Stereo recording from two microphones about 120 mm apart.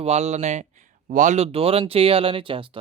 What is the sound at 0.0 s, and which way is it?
Speech, 65° right (ahead or behind).